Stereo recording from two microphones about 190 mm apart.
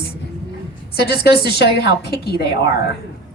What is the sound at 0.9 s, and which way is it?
A woman's voice, 55° left (ahead or behind).